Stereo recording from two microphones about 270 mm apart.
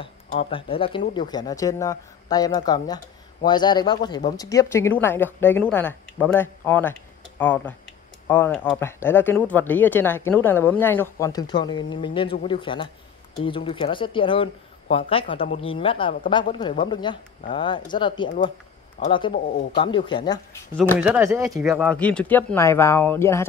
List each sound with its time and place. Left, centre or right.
0.0 s a woman's voice: left
20.7 s speech: centre
21.0 s a woman's voice: centre